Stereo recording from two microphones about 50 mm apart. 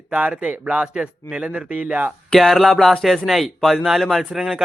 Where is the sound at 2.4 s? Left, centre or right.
Centre.